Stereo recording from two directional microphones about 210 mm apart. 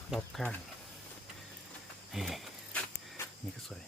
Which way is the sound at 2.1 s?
Centre (ahead or behind).